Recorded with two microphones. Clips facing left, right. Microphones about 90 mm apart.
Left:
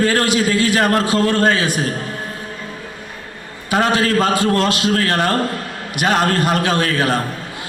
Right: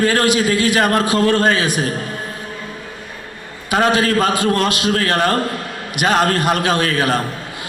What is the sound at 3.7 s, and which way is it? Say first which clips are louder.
A man's voice: right 1 dB; 15° right (ahead or behind).